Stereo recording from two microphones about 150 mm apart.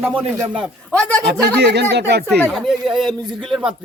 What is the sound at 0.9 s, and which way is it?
Speech, 5° left (ahead or behind).